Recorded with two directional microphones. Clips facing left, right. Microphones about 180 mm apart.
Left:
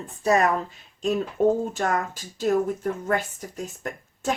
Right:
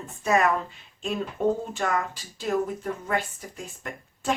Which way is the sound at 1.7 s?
45° left (ahead or behind).